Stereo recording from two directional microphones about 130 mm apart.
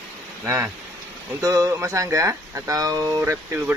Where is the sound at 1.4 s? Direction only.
25° right (ahead or behind).